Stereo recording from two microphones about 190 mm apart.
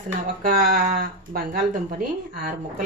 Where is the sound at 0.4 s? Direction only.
50° right (ahead or behind).